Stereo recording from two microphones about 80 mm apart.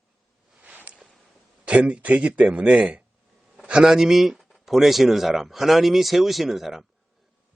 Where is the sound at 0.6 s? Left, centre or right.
Centre.